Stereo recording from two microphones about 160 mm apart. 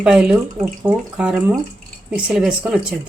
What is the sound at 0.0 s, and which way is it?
Speech, 5° right (ahead or behind).